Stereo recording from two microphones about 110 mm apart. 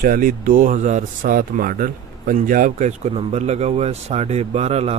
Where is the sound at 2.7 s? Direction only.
90° right.